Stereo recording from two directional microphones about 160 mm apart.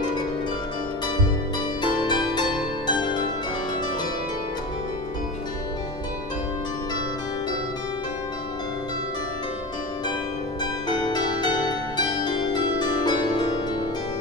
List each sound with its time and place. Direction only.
1.8 s pizzicato: 30° left (ahead or behind)
2.9 s music: 30° left (ahead or behind)
10.6 s pizzicato: 25° left (ahead or behind)
12.3 s harp: 30° left (ahead or behind)